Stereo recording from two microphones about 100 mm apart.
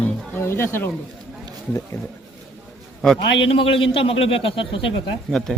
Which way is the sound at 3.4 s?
60° left (ahead or behind).